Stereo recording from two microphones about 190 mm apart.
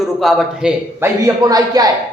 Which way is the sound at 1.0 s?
20° right (ahead or behind).